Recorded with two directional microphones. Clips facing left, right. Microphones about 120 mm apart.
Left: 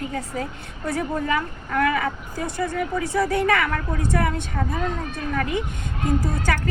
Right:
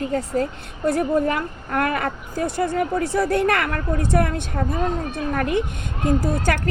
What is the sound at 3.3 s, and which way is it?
A woman's voice, 55° right (ahead or behind).